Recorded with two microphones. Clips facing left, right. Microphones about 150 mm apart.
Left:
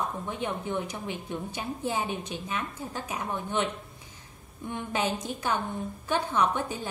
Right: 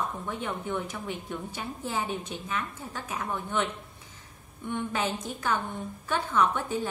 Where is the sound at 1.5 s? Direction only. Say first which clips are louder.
Left 3 dB; 15° left (ahead or behind).